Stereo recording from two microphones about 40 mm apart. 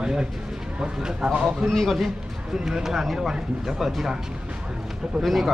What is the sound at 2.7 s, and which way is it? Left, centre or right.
A man's voice, centre.